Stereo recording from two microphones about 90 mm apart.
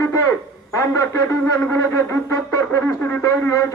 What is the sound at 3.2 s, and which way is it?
Speech, 40° left (ahead or behind).